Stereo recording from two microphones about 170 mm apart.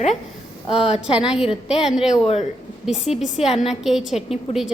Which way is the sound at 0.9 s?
5° right (ahead or behind).